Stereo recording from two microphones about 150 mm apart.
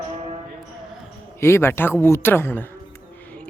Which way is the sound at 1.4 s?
15° left (ahead or behind).